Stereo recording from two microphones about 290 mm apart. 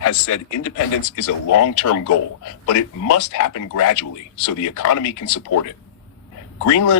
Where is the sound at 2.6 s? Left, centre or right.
Left.